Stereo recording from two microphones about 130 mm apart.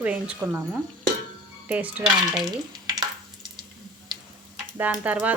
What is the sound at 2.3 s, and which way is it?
Stir, 30° right (ahead or behind).